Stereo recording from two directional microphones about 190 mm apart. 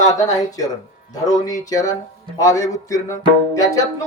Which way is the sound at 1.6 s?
20° left (ahead or behind).